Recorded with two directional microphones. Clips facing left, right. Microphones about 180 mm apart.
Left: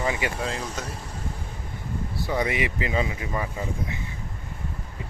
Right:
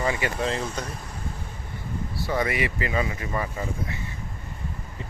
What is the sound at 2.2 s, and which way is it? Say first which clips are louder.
Speech: even; 15° left (ahead or behind).